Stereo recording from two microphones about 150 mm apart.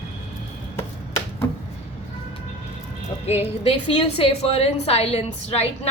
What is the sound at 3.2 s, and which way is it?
A woman's voice, 45° left (ahead or behind).